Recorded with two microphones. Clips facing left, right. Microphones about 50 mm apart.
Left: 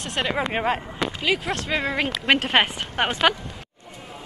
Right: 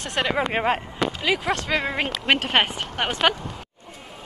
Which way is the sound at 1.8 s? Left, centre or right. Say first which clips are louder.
Left 1 dB; right.